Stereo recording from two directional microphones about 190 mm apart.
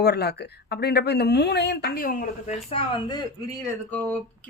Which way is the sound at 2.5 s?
30° left (ahead or behind).